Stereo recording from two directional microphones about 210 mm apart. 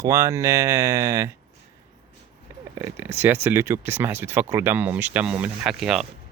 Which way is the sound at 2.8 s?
10° right (ahead or behind).